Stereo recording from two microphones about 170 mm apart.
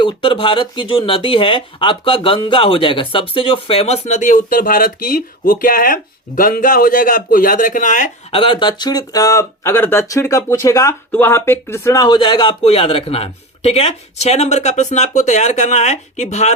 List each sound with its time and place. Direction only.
0.0 s speech: 30° left (ahead or behind); by 8.1 s 50° left (ahead or behind)
8.3 s speech: 30° left (ahead or behind)